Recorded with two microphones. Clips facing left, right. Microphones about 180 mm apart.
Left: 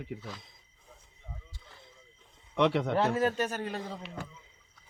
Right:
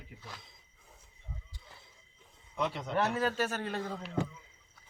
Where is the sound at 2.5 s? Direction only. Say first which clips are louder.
Left 8 dB; 70° left (ahead or behind).